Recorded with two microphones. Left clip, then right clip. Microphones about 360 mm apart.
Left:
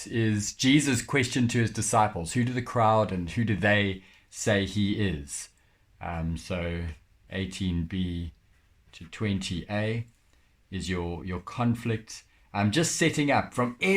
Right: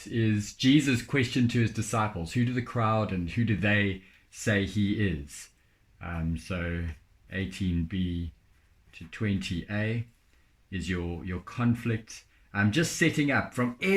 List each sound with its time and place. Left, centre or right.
0.3 s speech: centre